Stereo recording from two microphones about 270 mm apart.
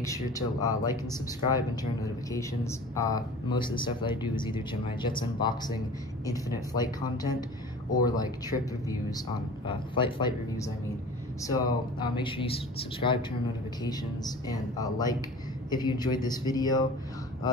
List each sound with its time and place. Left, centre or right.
0.0 s speech: centre
12.0 s speech: centre